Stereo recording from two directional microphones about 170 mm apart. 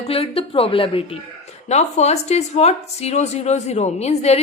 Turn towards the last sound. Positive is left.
turn(degrees=40)  # may be behind; listen again after turning